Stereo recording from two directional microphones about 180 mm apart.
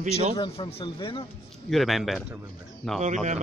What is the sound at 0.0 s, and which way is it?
Speech, 40° right (ahead or behind).